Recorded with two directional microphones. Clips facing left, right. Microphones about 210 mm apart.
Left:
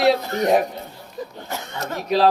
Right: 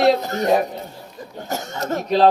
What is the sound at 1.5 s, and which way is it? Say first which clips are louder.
Speech: right 8 dB; 45° right (ahead or behind).